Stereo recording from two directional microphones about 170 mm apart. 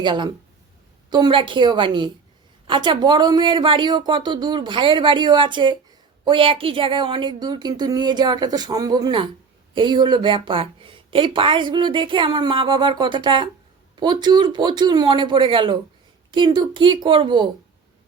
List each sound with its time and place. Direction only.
0.0 s a woman's voice: 25° right (ahead or behind)